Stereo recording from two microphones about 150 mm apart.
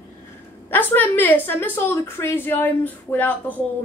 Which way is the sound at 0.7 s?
10° left (ahead or behind).